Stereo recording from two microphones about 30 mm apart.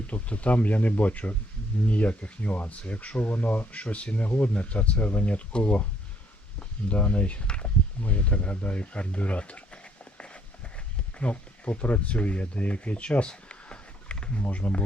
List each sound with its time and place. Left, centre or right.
0.1 s speech: left
3.3 s speech: left
3.8 s speech: left
5.5 s speech: left
6.6 s speech: left
9.4 s a sound: left
11.2 s speech: left
13.2 s a sound: left
14.5 s speech: left